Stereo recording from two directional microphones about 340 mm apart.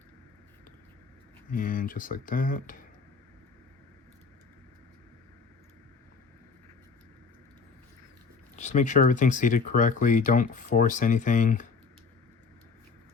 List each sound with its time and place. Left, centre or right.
1.5 s speech: left
8.5 s speech: left